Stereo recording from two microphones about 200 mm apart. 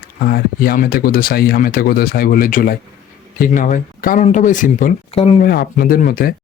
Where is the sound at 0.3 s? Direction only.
50° left (ahead or behind); by 5.4 s 30° left (ahead or behind).